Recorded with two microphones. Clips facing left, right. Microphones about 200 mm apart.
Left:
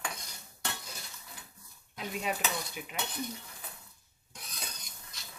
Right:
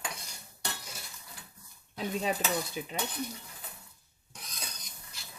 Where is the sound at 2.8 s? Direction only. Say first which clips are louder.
Right 5 dB; 30° right (ahead or behind).